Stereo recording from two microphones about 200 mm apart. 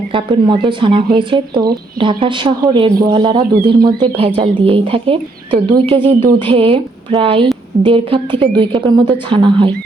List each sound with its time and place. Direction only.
0.1 s a woman's voice: 25° right (ahead or behind)